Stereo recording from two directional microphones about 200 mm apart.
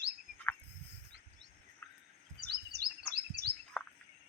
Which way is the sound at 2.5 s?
55° right (ahead or behind).